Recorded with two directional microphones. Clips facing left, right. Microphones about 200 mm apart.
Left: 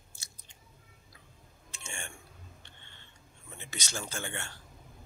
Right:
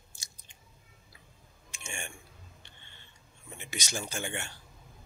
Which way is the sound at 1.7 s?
15° right (ahead or behind).